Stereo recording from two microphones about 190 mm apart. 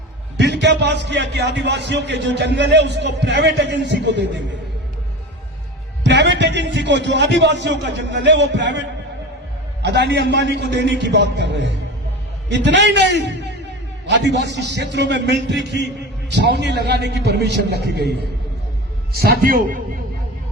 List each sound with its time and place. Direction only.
0.3 s a man's voice: 65° right (ahead or behind)
6.0 s a man's voice: 65° right (ahead or behind); by 19.8 s 45° right (ahead or behind)